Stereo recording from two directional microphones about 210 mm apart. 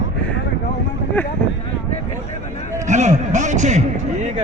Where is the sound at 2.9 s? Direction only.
35° right (ahead or behind).